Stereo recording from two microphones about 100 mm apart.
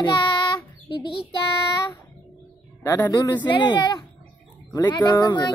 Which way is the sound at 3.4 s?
50° left (ahead or behind).